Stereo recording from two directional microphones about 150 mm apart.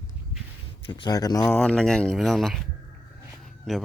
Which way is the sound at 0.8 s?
30° left (ahead or behind).